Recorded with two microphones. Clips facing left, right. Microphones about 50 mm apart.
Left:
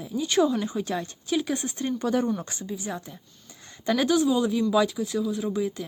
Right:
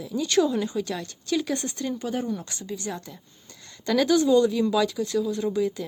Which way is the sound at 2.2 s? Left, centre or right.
Left.